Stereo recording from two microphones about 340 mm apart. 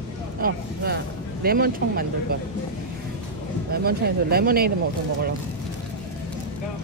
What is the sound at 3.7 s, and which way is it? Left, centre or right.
Speech, right.